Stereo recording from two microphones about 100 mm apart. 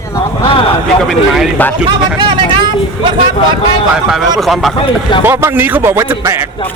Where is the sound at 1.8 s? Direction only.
50° right (ahead or behind).